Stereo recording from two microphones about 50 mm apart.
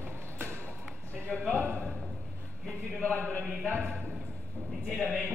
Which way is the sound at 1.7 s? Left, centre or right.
Centre.